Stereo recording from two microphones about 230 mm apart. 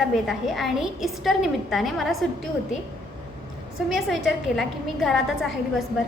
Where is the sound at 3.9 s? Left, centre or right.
Centre.